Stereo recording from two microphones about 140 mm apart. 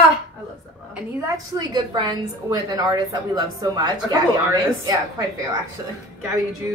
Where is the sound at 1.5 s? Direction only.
30° right (ahead or behind).